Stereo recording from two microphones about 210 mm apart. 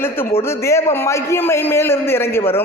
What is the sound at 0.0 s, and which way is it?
A man's voice, 10° left (ahead or behind).